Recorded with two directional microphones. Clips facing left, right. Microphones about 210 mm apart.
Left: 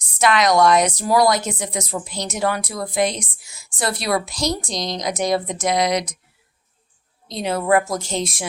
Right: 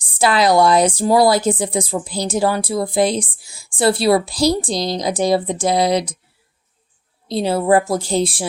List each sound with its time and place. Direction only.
0.0 s speech: 30° right (ahead or behind)
7.3 s speech: 30° right (ahead or behind)